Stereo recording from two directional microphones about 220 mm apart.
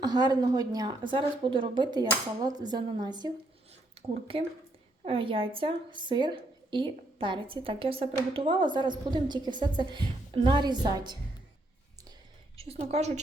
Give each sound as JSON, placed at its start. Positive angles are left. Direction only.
{"t": 0.0, "sound": "a woman's voice", "side_deg": -20}
{"t": 4.0, "sound": "a sound", "side_deg": -25}
{"t": 4.3, "sound": "a woman's voice", "side_deg": -25}
{"t": 12.5, "sound": "a woman's voice", "side_deg": -25}